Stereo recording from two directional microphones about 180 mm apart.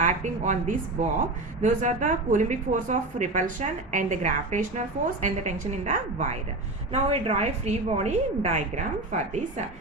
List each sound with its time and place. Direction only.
0.0 s a woman's voice: 45° right (ahead or behind)